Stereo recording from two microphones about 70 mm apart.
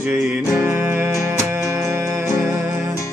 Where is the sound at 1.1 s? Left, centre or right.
Right.